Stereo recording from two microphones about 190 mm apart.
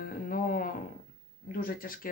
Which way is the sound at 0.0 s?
50° left (ahead or behind).